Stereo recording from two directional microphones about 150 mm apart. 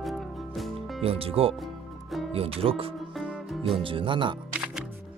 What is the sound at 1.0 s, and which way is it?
Speech, 40° right (ahead or behind).